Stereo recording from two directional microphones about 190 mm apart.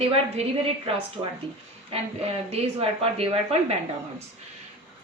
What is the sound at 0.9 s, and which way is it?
Speech, 30° right (ahead or behind).